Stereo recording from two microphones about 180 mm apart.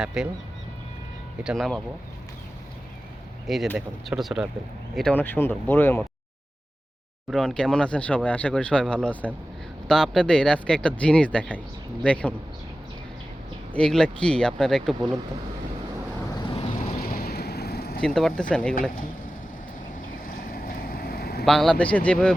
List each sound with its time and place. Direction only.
0.0 s speech: 5° right (ahead or behind)
1.5 s speech: centre (ahead or behind)
3.4 s speech: centre (ahead or behind)
7.3 s speech: 5° left (ahead or behind)
13.7 s speech: 5° left (ahead or behind)
16.3 s vehicle: 25° left (ahead or behind)
17.0 s vehicle: 55° left (ahead or behind)
18.0 s speech: centre (ahead or behind)
20.2 s boat: 55° left (ahead or behind)
21.4 s speech: centre (ahead or behind)